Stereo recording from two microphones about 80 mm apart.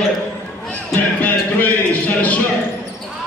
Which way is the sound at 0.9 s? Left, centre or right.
Left.